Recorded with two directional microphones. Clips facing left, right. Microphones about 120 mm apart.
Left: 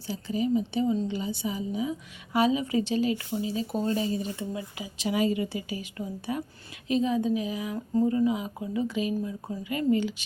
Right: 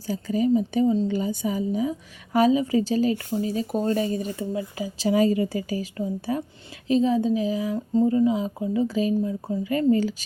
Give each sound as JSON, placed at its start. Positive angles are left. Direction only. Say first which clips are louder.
{"t": 0.1, "sound": "a woman's voice", "louder": "right 5 dB", "side_deg": -45}